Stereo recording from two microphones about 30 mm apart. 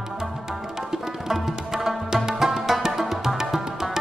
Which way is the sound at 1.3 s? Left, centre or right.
Centre.